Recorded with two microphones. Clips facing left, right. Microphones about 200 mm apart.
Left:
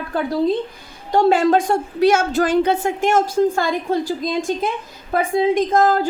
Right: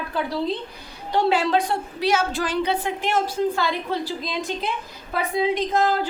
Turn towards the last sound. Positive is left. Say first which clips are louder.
# left 5 dB
turn(degrees=45)  # may be behind; listen again after turning